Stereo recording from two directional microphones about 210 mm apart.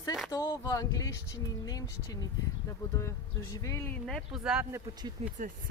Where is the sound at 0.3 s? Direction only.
15° left (ahead or behind).